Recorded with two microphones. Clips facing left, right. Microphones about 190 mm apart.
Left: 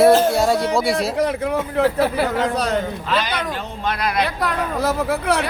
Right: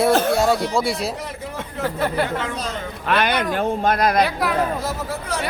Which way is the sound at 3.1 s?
60° right (ahead or behind).